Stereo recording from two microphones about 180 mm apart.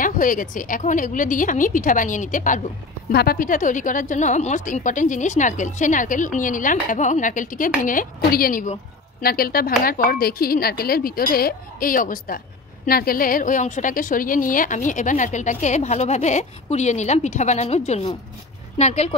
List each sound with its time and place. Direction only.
0.0 s a woman's voice: 50° left (ahead or behind)
3.1 s a woman's voice: 60° left (ahead or behind); by 19.1 s 40° left (ahead or behind)